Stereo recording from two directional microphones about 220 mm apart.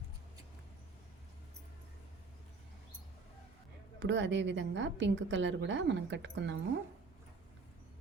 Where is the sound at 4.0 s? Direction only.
55° right (ahead or behind).